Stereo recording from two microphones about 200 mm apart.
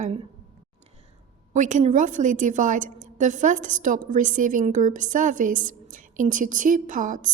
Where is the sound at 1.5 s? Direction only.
40° right (ahead or behind).